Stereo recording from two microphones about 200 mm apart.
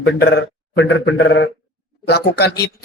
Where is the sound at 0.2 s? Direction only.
60° left (ahead or behind).